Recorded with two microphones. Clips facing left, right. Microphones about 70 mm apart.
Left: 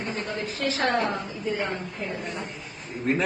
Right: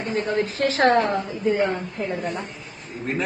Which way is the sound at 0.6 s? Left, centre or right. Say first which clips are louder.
Right 7 dB; right.